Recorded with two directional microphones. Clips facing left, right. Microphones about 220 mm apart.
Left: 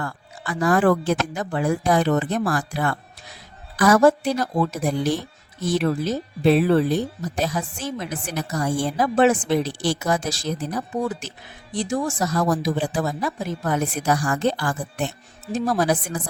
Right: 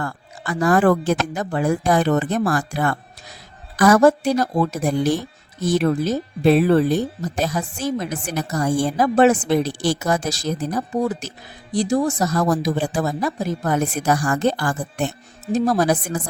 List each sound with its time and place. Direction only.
0.0 s speech: 45° right (ahead or behind)